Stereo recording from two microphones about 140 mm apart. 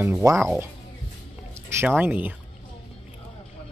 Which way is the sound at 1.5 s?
20° right (ahead or behind).